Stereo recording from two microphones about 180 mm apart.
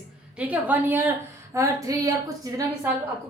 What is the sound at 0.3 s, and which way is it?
A woman's voice, 10° right (ahead or behind).